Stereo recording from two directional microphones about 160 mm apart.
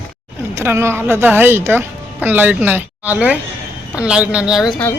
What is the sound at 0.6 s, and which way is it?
A woman's voice, 15° right (ahead or behind).